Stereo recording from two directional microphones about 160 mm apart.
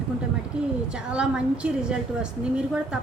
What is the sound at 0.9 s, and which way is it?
A woman's voice, 5° right (ahead or behind).